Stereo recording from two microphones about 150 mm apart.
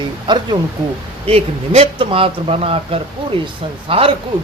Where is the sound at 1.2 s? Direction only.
40° right (ahead or behind).